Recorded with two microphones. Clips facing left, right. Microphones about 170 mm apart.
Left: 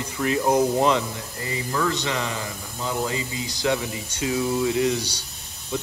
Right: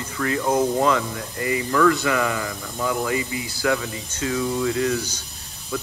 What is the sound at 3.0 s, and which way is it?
Speech, 25° left (ahead or behind).